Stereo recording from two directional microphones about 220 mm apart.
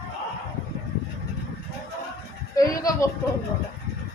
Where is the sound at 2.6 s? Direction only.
15° left (ahead or behind).